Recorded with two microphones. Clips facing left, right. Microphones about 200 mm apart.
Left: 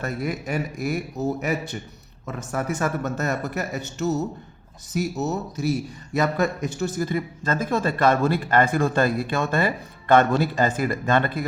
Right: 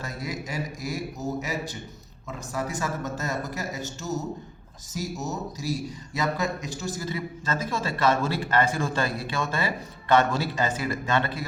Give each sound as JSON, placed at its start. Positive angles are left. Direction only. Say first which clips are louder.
{"t": 0.0, "sound": "a man's voice", "louder": "left 6 dB", "side_deg": 60}